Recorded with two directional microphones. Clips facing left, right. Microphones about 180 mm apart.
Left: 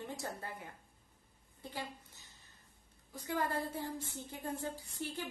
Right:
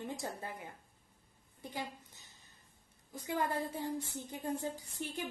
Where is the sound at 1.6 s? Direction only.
15° right (ahead or behind).